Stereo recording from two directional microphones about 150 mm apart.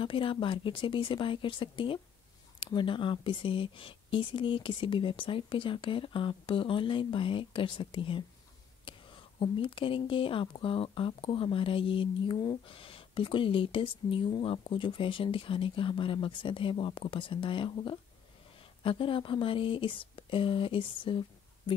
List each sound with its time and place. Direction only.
0.0 s speech: 35° left (ahead or behind)